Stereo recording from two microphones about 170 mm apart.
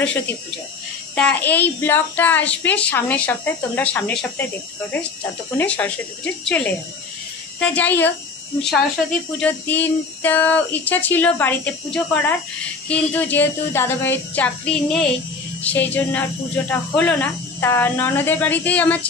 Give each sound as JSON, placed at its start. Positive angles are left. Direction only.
{"t": 0.0, "sound": "speech", "side_deg": 10}
{"t": 5.6, "sound": "speech", "side_deg": 10}